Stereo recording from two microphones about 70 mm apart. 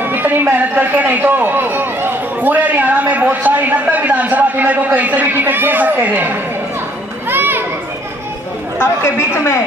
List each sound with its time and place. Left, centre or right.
0.0 s a sound: right
7.2 s children playing: right
8.7 s a woman's voice: left